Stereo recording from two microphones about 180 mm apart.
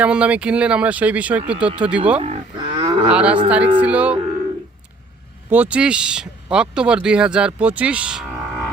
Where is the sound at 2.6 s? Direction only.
25° right (ahead or behind).